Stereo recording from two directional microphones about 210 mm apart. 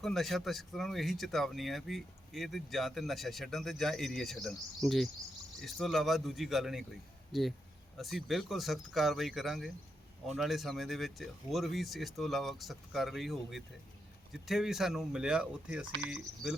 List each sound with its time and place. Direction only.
0.0 s speech: centre (ahead or behind)